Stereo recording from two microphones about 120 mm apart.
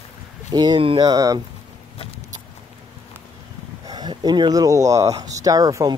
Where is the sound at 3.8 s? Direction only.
35° right (ahead or behind).